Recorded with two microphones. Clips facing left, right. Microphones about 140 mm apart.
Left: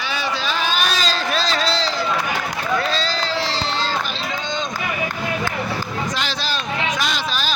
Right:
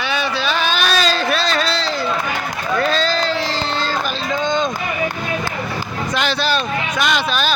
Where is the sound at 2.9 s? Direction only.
55° right (ahead or behind).